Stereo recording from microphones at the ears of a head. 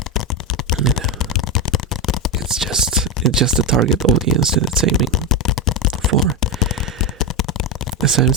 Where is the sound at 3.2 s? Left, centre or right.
Right.